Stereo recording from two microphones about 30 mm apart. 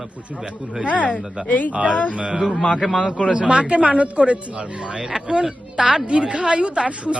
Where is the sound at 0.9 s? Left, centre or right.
Left.